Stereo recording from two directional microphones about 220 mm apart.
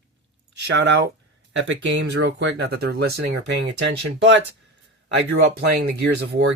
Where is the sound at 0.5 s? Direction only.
55° right (ahead or behind).